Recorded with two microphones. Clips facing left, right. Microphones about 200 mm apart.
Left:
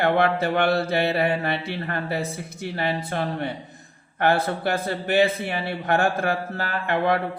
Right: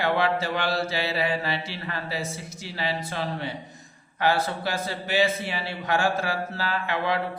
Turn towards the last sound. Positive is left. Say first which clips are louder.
# left 4 dB
turn(degrees=55)  # may be behind; listen again after turning